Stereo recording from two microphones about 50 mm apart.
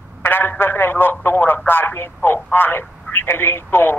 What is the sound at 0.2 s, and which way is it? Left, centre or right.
A man's voice, left.